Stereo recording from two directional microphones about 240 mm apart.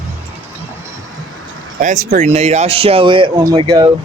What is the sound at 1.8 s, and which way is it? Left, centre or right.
Speech, right.